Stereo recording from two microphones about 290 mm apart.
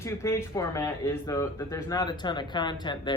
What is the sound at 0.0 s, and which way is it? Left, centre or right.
Speech, centre.